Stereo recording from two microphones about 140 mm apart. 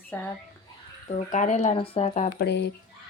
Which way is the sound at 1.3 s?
60° left (ahead or behind).